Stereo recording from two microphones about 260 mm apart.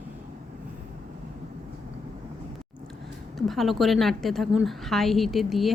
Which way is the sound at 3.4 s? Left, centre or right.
Centre.